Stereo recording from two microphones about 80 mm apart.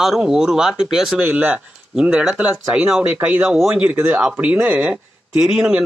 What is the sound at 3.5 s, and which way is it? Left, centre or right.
Speech, centre.